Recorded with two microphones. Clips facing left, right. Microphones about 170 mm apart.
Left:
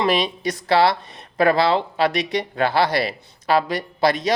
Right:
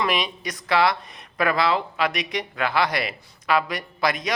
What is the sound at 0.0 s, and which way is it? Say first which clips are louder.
Speech: left 5 dB; 30° left (ahead or behind).